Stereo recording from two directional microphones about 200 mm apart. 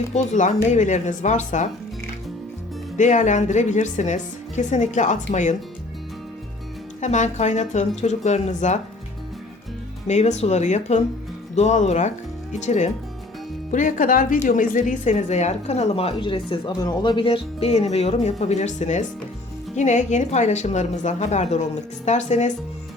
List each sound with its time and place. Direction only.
0.1 s speech: 35° left (ahead or behind)
3.0 s speech: 35° left (ahead or behind)
7.0 s speech: 35° left (ahead or behind)
10.1 s speech: 35° left (ahead or behind)